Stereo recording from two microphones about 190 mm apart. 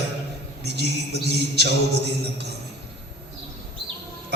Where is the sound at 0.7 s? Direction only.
60° right (ahead or behind).